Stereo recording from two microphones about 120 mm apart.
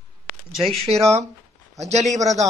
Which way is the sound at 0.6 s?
Centre (ahead or behind).